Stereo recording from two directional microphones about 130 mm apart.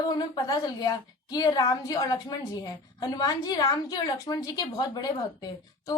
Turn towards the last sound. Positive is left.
turn(degrees=30)  # may be behind; listen again after turning